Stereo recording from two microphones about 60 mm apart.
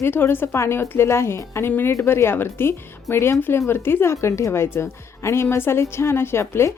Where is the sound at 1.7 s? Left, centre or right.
Left.